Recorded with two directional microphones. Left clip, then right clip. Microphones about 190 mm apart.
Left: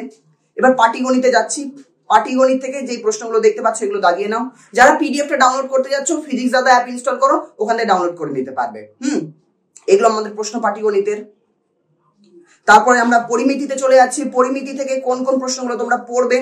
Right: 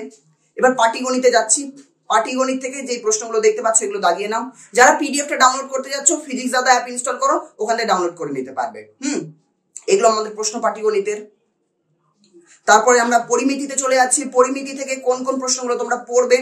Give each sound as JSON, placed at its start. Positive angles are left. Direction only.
{"t": 0.6, "sound": "speech", "side_deg": -15}
{"t": 12.4, "sound": "speech", "side_deg": -15}